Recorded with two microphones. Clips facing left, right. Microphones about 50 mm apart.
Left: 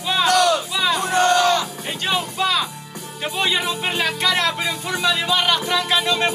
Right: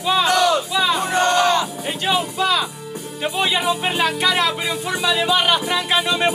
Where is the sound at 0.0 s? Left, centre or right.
Centre.